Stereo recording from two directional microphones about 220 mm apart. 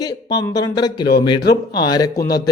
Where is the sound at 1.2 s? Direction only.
20° left (ahead or behind).